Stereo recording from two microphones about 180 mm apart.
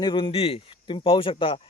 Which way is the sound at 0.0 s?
25° left (ahead or behind).